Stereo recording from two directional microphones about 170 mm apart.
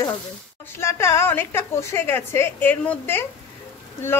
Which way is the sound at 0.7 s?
15° left (ahead or behind).